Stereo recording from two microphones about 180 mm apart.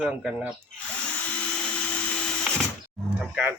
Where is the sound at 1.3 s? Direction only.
5° left (ahead or behind).